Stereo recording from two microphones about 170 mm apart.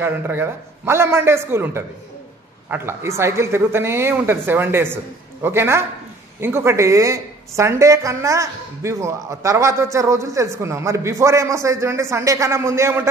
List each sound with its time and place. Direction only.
0.0 s a woman's voice: 15° right (ahead or behind)